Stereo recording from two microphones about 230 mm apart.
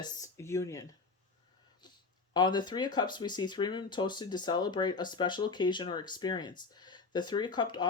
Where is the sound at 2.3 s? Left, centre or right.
Centre.